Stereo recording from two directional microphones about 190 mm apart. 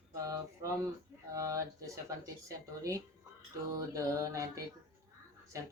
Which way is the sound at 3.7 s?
15° right (ahead or behind).